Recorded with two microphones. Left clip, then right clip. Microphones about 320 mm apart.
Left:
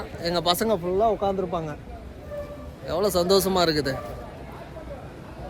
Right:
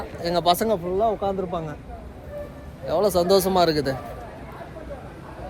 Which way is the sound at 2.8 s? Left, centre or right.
Centre.